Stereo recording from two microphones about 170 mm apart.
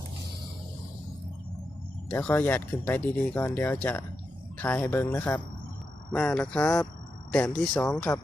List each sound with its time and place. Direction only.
2.0 s speech: 10° left (ahead or behind)